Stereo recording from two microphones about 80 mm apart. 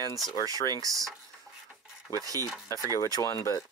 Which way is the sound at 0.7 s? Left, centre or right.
Right.